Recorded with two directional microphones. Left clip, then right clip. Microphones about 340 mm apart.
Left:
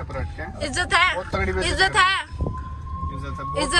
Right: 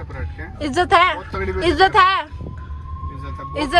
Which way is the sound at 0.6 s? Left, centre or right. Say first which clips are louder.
Right 5 dB; centre.